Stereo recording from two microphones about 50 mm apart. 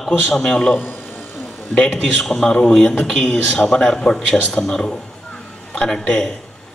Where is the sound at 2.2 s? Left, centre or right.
Centre.